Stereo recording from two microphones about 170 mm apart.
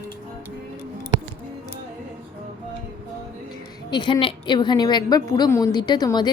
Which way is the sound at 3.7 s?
25° left (ahead or behind).